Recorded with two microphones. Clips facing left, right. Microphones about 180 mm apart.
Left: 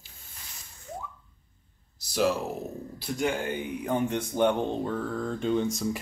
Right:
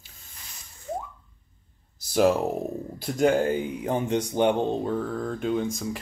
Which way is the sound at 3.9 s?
25° right (ahead or behind).